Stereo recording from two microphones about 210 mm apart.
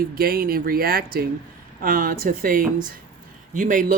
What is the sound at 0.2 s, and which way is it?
Speech, 45° right (ahead or behind).